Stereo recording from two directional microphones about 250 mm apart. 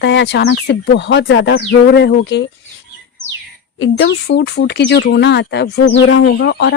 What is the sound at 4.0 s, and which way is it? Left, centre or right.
Speech, left.